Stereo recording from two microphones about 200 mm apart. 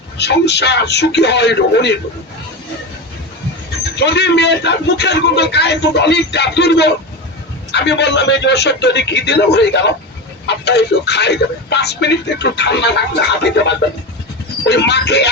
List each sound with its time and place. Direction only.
0.2 s a man's voice: 55° left (ahead or behind)
3.9 s a man's voice: 60° left (ahead or behind)